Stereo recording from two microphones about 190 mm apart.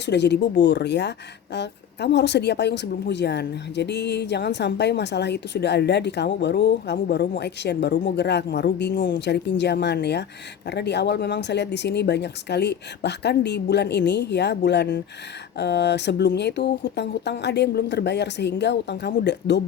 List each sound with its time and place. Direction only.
0.0 s speech: 65° left (ahead or behind)